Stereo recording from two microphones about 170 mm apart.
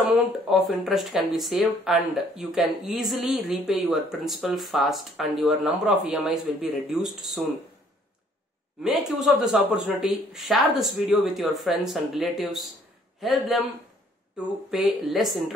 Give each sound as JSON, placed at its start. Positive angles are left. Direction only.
{"t": 0.1, "sound": "speech", "side_deg": 0}
{"t": 8.8, "sound": "speech", "side_deg": 0}
{"t": 14.7, "sound": "speech", "side_deg": 0}